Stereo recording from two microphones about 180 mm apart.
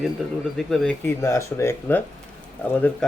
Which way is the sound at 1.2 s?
15° left (ahead or behind).